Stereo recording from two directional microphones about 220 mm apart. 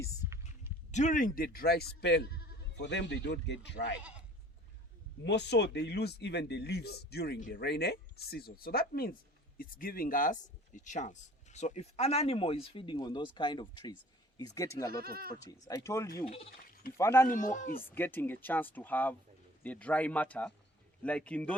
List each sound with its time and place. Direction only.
0.9 s speech: 30° left (ahead or behind); by 3.9 s 50° left (ahead or behind)
5.2 s speech: 50° left (ahead or behind); by 15.0 s 15° left (ahead or behind)
15.0 s speech: 45° right (ahead or behind)
15.4 s speech: 15° left (ahead or behind)
16.2 s speech: 30° left (ahead or behind)
17.0 s speech: 10° left (ahead or behind)
17.2 s a man's voice: 35° left (ahead or behind)
17.9 s speech: 10° left (ahead or behind)